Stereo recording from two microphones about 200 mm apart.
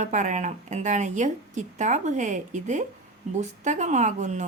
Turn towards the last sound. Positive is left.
turn(degrees=-35)  # may be behind; listen again after turning